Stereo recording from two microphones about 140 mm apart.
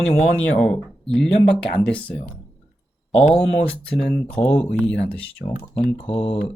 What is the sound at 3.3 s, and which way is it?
Speech, 10° left (ahead or behind).